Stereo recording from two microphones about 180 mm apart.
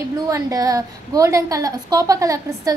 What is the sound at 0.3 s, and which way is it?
A woman's voice, 20° right (ahead or behind).